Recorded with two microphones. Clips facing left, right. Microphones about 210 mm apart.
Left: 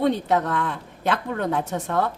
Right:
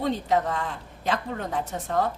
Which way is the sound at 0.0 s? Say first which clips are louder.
Left 3 dB; 70° left (ahead or behind).